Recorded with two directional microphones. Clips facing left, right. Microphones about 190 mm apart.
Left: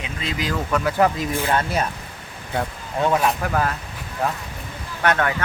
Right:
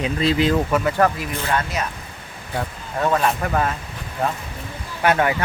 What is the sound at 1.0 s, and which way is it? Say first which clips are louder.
Speech: left 1 dB; 10° left (ahead or behind).